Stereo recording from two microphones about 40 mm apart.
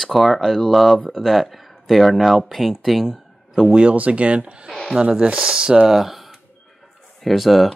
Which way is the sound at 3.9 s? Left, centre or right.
Right.